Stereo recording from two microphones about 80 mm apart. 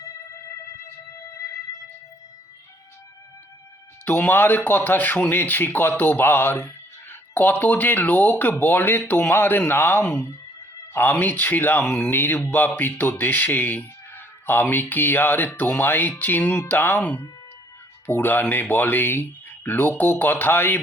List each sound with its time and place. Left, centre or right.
4.0 s speech: left
12.1 s speech: left